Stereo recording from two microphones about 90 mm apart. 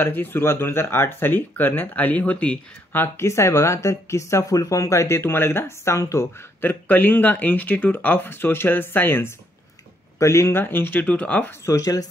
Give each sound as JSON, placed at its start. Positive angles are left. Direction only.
{"t": 0.0, "sound": "speech", "side_deg": 25}
{"t": 6.6, "sound": "speech", "side_deg": 20}
{"t": 11.6, "sound": "speech", "side_deg": 35}